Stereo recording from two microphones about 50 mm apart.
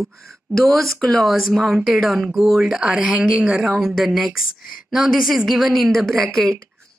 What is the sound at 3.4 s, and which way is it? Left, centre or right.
Speech, right.